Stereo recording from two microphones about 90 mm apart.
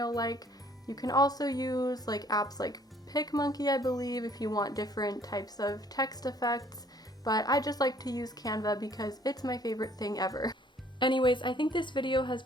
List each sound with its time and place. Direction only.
0.0 s speech: 45° left (ahead or behind)
11.0 s speech: 60° left (ahead or behind)